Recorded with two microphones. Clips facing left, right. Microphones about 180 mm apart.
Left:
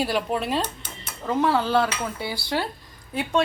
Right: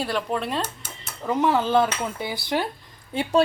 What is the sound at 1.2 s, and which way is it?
Speech, 15° right (ahead or behind).